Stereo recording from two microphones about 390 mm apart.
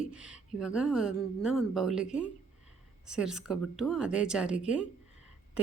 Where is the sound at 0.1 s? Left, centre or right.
Centre.